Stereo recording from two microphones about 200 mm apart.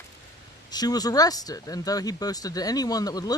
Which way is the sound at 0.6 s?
20° left (ahead or behind).